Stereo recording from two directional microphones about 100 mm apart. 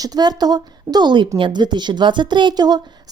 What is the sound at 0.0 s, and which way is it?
Speech, 40° right (ahead or behind).